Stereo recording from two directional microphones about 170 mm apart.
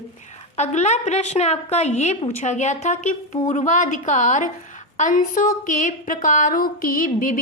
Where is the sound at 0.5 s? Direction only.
40° left (ahead or behind).